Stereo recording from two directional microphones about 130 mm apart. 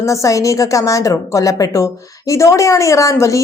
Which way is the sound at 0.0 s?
25° left (ahead or behind).